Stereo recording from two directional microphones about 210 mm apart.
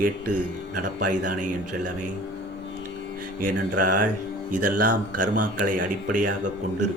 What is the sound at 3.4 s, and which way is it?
Speech, 40° right (ahead or behind).